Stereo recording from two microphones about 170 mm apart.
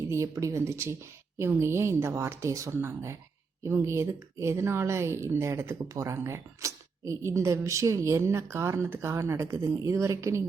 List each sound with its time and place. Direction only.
0.1 s speech: 15° right (ahead or behind)